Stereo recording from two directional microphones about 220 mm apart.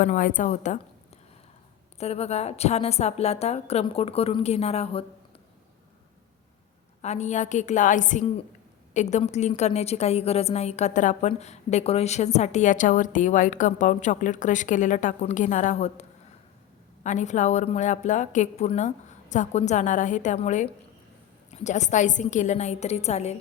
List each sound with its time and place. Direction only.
0.0 s a woman's voice: 35° left (ahead or behind)
2.0 s a woman's voice: 30° left (ahead or behind)
7.0 s a woman's voice: 30° left (ahead or behind)